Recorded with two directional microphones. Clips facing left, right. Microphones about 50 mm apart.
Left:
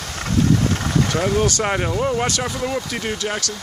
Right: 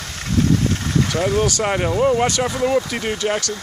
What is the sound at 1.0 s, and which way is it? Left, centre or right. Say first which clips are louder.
Speech: right 1 dB; centre.